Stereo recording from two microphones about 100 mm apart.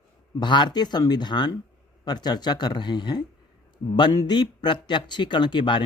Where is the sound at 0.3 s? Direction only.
50° left (ahead or behind).